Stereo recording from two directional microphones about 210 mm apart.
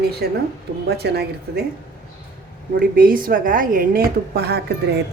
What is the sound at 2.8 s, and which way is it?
A woman's voice, 45° right (ahead or behind).